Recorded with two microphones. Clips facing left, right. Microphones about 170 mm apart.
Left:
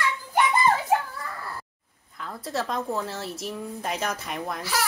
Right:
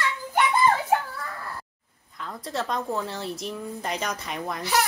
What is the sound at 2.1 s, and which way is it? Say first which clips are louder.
A woman's voice: left 1 dB; centre (ahead or behind).